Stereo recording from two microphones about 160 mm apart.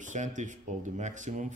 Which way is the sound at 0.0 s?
50° right (ahead or behind).